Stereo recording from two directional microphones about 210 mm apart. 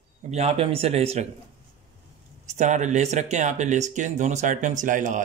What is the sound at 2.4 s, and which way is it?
Speech, 35° right (ahead or behind).